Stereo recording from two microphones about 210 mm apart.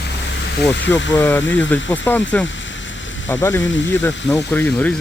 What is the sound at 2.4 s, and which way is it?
Rain, 60° left (ahead or behind).